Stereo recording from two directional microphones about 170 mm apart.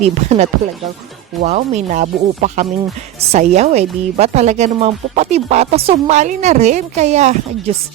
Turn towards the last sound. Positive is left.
turn(degrees=-45)  # may be behind; listen again after turning